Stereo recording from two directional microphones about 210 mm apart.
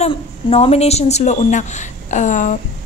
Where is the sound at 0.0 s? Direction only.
30° left (ahead or behind).